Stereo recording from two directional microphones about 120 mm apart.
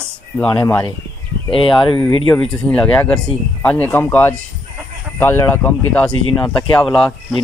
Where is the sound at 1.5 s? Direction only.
45° left (ahead or behind).